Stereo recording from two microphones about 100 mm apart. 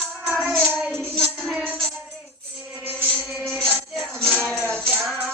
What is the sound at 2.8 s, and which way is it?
Music, 20° right (ahead or behind).